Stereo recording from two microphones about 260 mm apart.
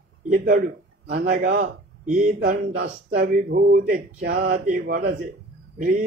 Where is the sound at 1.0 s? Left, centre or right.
Right.